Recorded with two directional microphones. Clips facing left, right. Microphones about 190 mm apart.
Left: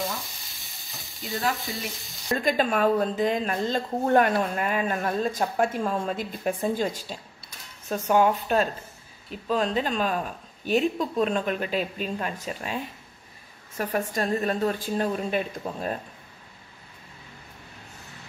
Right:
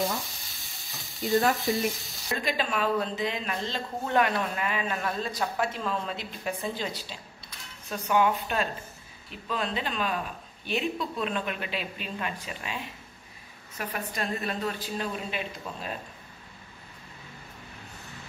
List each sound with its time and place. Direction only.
0.2 s stir: centre (ahead or behind)
1.9 s frying: centre (ahead or behind)
2.2 s speech: 45° left (ahead or behind)